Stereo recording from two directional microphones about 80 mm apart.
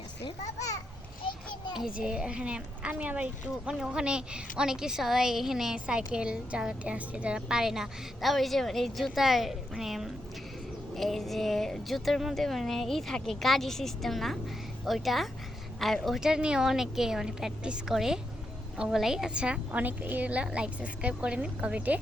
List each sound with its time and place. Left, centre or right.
1.2 s a child's voice: left
1.8 s a woman's voice: centre
3.7 s a woman's voice: centre